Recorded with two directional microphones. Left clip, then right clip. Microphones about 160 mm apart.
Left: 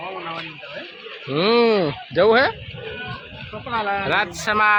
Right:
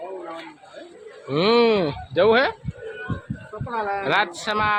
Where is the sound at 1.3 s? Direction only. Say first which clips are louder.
Left 1 dB; centre (ahead or behind).